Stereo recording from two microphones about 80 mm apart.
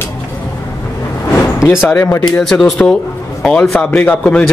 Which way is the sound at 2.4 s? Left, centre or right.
Centre.